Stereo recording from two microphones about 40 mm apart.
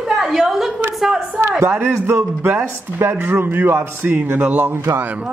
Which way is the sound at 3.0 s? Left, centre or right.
Right.